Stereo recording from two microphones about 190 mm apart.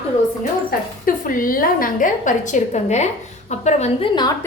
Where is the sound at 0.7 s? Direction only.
45° left (ahead or behind); by 4.3 s 25° left (ahead or behind).